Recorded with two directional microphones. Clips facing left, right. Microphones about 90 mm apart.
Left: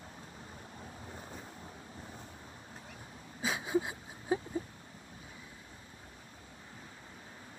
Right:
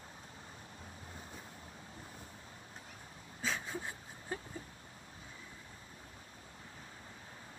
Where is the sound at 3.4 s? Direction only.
10° left (ahead or behind).